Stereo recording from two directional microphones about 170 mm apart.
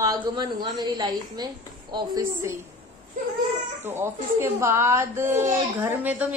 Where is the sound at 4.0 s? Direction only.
15° right (ahead or behind).